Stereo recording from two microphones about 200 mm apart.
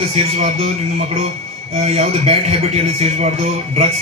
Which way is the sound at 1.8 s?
30° right (ahead or behind).